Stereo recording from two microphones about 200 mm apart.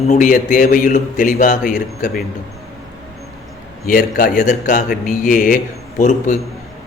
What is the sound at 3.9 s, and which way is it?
A man's voice, 45° left (ahead or behind).